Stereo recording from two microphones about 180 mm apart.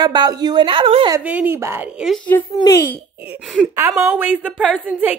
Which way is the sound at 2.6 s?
15° left (ahead or behind).